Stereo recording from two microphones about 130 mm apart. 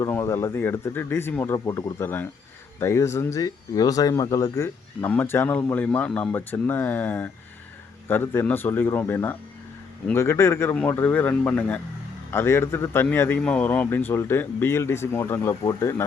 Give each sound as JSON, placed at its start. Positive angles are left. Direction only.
{"t": 0.0, "sound": "a man's voice", "side_deg": 20}